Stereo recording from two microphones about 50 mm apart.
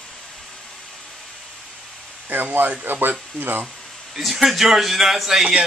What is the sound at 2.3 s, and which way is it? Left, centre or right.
Speech, right.